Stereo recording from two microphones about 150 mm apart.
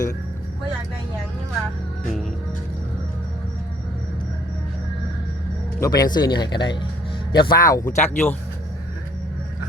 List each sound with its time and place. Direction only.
5.8 s speech: 25° left (ahead or behind)